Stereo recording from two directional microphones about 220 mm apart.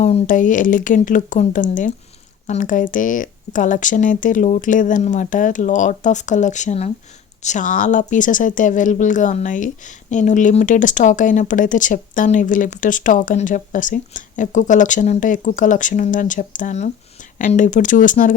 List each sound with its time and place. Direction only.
0.0 s speech: 35° left (ahead or behind)